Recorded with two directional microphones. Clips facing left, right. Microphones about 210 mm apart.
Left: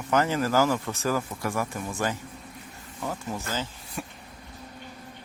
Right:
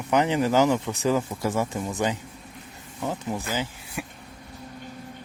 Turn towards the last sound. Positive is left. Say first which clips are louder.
# right 3 dB
turn(degrees=-15)  # may be behind; listen again after turning